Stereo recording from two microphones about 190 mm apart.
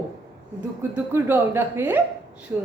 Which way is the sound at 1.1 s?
10° right (ahead or behind).